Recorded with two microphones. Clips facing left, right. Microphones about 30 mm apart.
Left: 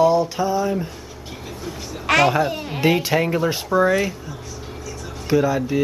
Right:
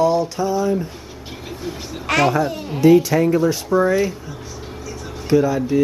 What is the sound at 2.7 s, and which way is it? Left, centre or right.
Speech, left.